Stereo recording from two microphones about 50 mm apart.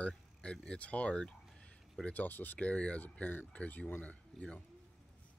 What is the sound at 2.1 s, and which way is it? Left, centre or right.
Speech, left.